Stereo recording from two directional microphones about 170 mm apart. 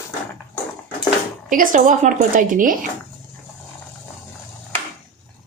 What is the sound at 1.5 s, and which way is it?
A woman's voice, 50° right (ahead or behind).